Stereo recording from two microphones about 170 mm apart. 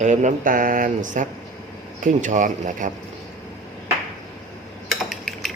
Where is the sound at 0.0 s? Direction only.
45° right (ahead or behind).